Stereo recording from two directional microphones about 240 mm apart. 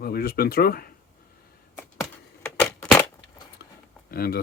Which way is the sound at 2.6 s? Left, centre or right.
Centre.